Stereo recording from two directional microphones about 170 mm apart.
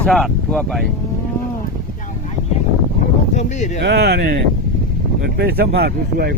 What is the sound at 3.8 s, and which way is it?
Speech, 70° right (ahead or behind).